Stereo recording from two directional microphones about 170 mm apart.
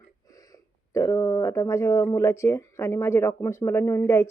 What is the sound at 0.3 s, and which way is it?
Speech, 20° left (ahead or behind).